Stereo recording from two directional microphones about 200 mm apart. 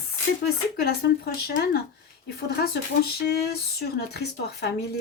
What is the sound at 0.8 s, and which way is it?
Speech, 50° left (ahead or behind).